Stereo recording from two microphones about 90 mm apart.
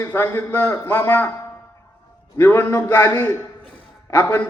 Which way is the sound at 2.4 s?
25° left (ahead or behind).